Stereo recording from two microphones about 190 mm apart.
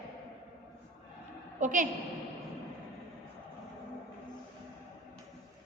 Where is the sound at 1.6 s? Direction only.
40° right (ahead or behind).